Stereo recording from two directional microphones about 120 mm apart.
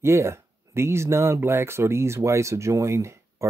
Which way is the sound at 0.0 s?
25° right (ahead or behind).